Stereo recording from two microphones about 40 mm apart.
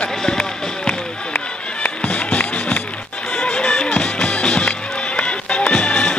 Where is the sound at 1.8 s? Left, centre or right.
Left.